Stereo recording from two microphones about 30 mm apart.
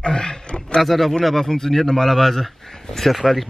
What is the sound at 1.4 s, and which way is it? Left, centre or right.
Speech, centre.